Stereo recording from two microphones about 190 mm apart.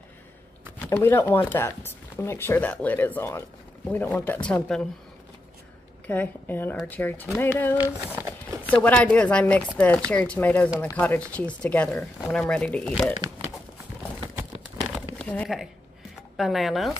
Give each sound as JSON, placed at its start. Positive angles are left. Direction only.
{"t": 0.7, "sound": "speech", "side_deg": 10}
{"t": 6.0, "sound": "speech", "side_deg": 10}
{"t": 8.2, "sound": "horse", "side_deg": -15}
{"t": 8.8, "sound": "speech", "side_deg": 5}
{"t": 15.1, "sound": "speech", "side_deg": 5}